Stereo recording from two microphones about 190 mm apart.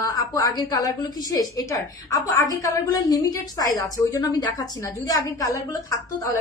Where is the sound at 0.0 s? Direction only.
20° left (ahead or behind).